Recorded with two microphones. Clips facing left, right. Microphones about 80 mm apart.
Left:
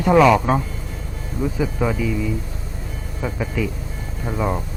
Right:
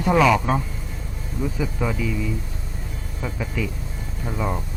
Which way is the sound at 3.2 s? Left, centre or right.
Centre.